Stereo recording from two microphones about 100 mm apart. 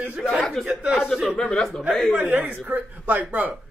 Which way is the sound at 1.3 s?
5° left (ahead or behind).